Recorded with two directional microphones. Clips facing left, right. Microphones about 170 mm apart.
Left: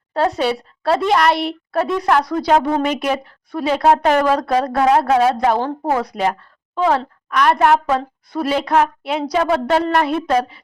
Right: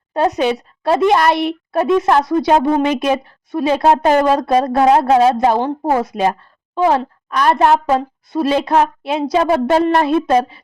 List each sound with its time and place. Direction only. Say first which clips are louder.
0.1 s a woman's voice: right 2 dB; 20° right (ahead or behind)